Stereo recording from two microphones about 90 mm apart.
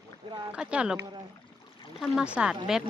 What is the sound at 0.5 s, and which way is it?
Speech, 10° right (ahead or behind).